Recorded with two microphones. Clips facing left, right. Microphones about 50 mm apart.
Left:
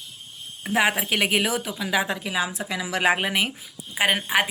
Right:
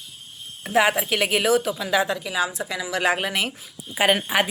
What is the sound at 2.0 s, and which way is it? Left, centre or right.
Speech, left.